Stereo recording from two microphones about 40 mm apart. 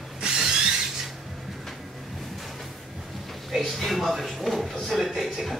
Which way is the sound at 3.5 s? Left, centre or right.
Centre.